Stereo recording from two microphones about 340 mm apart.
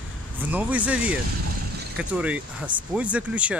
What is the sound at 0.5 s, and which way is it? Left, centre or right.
Speech, centre.